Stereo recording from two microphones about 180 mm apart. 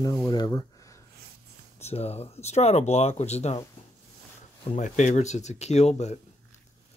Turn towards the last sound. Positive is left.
turn(degrees=40)  # may be behind; listen again after turning